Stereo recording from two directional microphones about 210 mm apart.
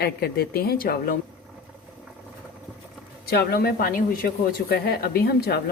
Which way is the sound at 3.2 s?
50° left (ahead or behind).